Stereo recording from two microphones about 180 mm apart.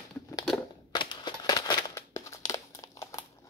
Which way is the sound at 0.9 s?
25° left (ahead or behind).